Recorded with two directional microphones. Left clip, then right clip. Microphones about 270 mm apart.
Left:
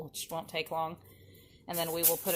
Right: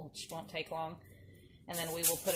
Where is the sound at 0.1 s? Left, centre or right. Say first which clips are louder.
Left 5 dB; left.